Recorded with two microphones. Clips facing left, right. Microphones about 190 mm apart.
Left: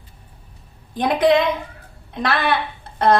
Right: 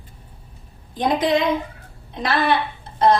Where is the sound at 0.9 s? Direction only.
60° left (ahead or behind).